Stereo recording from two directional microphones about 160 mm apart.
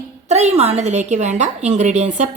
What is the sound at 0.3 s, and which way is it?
A woman's voice, 45° right (ahead or behind).